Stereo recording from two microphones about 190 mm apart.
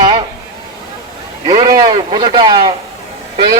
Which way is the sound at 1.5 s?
20° right (ahead or behind).